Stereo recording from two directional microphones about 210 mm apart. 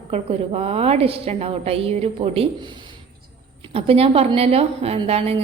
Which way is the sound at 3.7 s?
30° right (ahead or behind).